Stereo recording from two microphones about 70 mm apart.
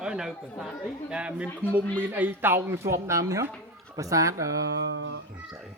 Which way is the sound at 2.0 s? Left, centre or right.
Right.